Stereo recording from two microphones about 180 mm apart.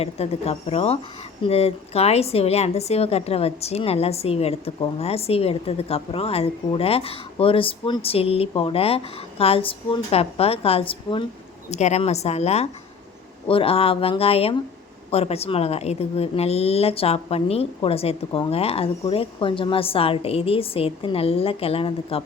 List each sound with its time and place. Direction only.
0.0 s a woman's voice: 35° left (ahead or behind)